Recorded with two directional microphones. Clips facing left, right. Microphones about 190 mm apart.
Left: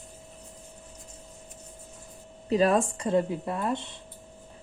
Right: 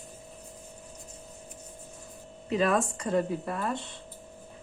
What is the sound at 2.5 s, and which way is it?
Speech, 35° left (ahead or behind).